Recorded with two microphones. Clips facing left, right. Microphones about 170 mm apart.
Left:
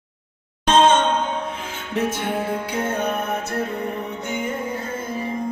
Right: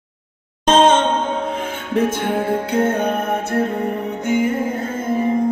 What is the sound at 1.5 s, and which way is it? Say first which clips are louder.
Music: right 6 dB; 55° right (ahead or behind).